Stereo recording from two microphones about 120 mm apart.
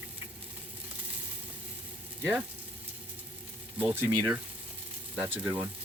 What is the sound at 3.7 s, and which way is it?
Speech, 15° right (ahead or behind).